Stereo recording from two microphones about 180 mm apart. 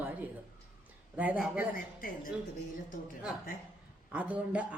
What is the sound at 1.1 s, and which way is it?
Speech, 10° right (ahead or behind).